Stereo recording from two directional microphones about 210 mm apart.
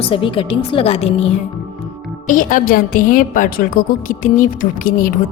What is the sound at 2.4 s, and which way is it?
A woman's voice, 40° left (ahead or behind).